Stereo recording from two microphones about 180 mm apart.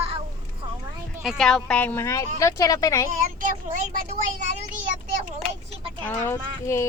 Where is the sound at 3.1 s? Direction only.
50° right (ahead or behind).